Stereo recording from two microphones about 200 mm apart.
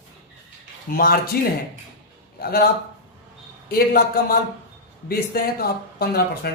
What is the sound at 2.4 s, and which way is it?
Speech, 50° left (ahead or behind).